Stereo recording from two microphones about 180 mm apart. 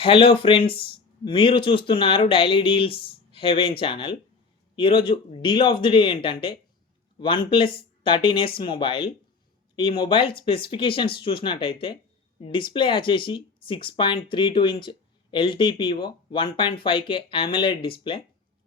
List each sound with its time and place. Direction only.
0.0 s speech: 30° left (ahead or behind)